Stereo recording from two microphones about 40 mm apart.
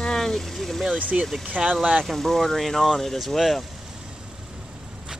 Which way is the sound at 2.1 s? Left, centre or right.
Centre.